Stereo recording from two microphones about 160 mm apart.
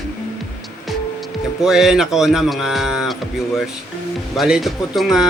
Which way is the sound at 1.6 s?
5° right (ahead or behind).